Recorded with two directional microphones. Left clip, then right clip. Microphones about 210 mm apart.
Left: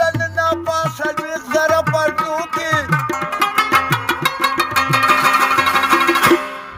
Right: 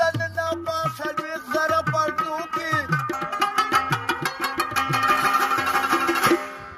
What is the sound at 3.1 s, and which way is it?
Music, 40° left (ahead or behind).